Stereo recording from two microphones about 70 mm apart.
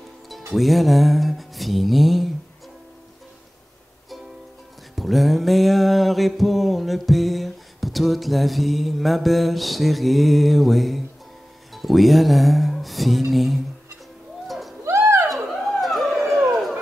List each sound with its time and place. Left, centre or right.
0.5 s mantra: centre
4.9 s mantra: centre
11.7 s music: centre
14.9 s a sound: right
15.2 s dog: centre